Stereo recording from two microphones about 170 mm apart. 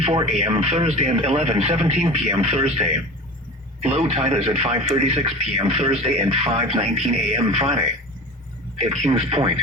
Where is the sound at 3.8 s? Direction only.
35° right (ahead or behind).